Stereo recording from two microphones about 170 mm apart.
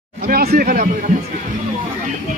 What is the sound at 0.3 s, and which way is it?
Speech, 65° right (ahead or behind).